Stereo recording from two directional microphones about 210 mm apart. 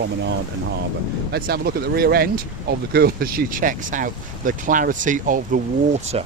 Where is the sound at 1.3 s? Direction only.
45° right (ahead or behind).